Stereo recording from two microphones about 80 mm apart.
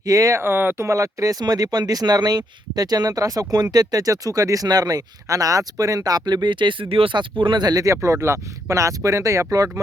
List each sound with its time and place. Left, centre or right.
0.0 s speech: right
0.3 s speech: right
0.9 s speech: right
7.9 s speech: right